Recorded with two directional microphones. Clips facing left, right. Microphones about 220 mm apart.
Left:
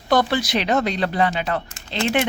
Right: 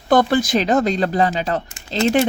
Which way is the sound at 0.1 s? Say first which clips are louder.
Right 4 dB; 50° right (ahead or behind).